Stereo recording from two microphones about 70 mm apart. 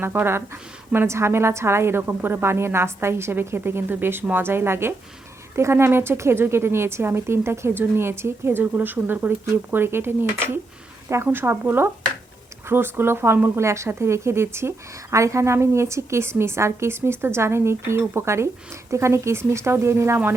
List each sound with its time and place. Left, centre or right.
0.0 s a woman's voice: right